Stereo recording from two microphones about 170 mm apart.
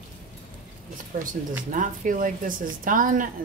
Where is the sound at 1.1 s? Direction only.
50° right (ahead or behind).